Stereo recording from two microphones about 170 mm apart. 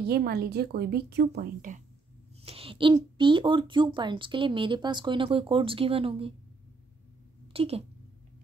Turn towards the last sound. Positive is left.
turn(degrees=-35)  # may be behind; listen again after turning